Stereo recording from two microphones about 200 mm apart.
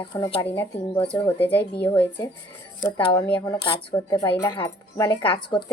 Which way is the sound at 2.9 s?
25° left (ahead or behind).